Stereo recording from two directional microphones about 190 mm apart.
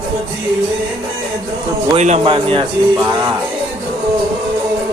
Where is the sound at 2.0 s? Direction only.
35° right (ahead or behind).